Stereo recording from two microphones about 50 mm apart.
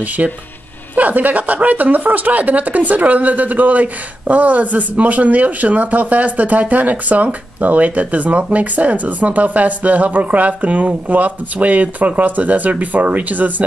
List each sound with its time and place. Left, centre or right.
0.2 s speech: right